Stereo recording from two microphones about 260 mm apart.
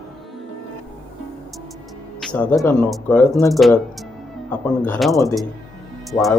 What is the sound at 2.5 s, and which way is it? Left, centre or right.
Speech, centre.